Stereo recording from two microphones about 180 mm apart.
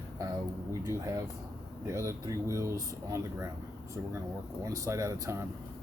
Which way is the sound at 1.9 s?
15° right (ahead or behind).